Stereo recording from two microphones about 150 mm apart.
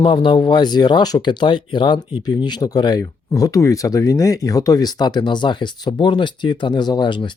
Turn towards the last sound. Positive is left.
turn(degrees=30)  # may be behind; listen again after turning